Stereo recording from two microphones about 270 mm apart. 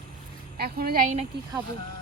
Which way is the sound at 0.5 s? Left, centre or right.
Right.